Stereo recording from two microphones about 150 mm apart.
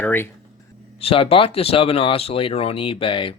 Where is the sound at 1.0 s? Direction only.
40° left (ahead or behind).